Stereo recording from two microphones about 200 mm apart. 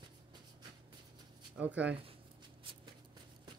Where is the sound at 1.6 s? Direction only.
5° right (ahead or behind).